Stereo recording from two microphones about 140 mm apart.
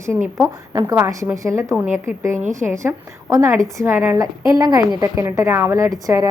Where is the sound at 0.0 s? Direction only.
20° right (ahead or behind).